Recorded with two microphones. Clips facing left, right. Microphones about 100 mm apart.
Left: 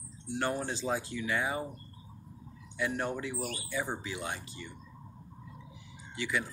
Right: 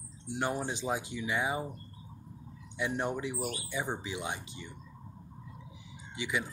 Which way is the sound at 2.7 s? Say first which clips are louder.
Even; 20° right (ahead or behind).